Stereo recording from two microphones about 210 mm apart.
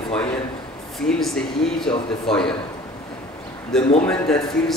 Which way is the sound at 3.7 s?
Centre (ahead or behind).